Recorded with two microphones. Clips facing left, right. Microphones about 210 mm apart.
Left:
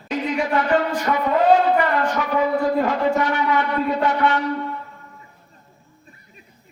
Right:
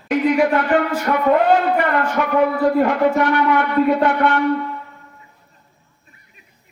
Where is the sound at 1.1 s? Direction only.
40° right (ahead or behind).